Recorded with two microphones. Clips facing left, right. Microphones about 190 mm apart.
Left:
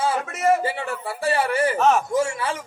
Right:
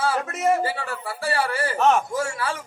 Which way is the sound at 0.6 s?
20° left (ahead or behind).